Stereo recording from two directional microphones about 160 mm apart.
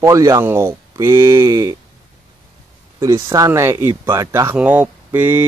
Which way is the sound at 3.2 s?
20° right (ahead or behind).